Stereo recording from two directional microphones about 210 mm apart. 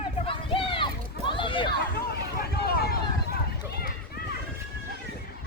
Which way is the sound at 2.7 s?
45° left (ahead or behind).